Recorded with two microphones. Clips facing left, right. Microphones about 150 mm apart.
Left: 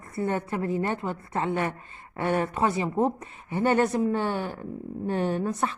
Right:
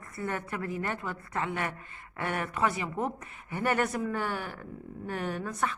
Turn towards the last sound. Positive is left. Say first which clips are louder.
# left 6 dB
turn(degrees=30)  # may be behind; listen again after turning